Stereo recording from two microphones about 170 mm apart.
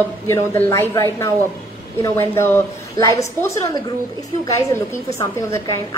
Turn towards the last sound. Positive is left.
turn(degrees=20)  # may be behind; listen again after turning